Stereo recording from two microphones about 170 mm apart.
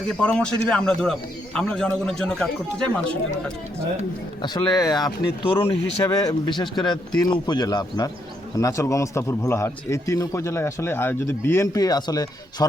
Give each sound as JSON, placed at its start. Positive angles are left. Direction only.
{"t": 0.2, "sound": "a man's voice", "side_deg": 5}
{"t": 4.4, "sound": "speech", "side_deg": 25}